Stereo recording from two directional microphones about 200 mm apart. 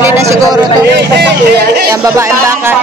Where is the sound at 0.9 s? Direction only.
55° right (ahead or behind).